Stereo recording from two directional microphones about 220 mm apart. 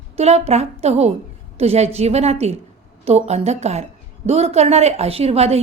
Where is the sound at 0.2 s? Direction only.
30° right (ahead or behind).